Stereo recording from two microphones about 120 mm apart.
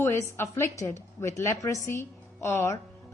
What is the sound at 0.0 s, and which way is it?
A woman's voice, 20° left (ahead or behind).